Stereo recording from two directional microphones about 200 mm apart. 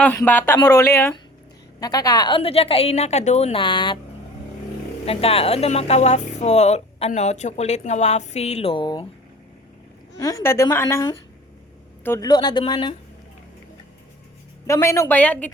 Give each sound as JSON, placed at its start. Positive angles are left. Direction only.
{"t": 0.0, "sound": "a woman's voice", "side_deg": 10}
{"t": 5.0, "sound": "a woman's voice", "side_deg": 30}
{"t": 10.2, "sound": "a woman's voice", "side_deg": 15}
{"t": 14.7, "sound": "speech", "side_deg": 15}